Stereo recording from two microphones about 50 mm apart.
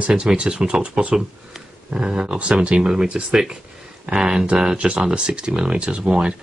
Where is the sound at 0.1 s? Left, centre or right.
Centre.